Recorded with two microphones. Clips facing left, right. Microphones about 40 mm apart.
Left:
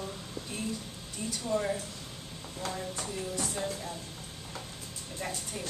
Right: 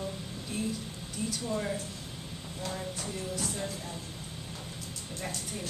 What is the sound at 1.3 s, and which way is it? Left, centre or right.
Speech, centre.